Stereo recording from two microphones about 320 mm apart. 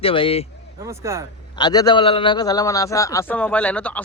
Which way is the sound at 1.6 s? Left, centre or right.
Centre.